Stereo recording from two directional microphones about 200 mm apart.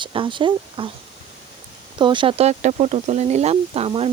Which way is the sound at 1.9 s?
25° right (ahead or behind).